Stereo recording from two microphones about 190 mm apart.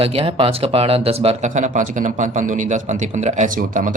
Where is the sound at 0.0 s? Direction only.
30° right (ahead or behind).